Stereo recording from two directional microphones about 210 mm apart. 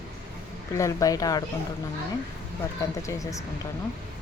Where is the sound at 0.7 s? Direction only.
15° left (ahead or behind).